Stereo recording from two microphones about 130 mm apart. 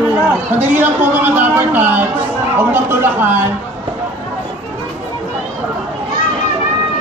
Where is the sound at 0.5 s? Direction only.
15° right (ahead or behind).